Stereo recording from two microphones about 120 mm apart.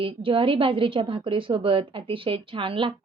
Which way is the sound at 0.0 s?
45° right (ahead or behind).